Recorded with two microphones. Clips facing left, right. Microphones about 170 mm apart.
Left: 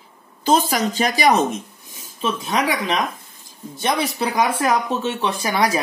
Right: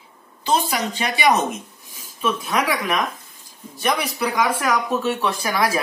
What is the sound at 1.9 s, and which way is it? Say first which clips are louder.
Speech: right 1 dB; 25° left (ahead or behind).